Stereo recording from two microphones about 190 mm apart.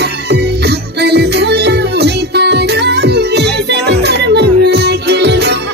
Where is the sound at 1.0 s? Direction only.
60° right (ahead or behind).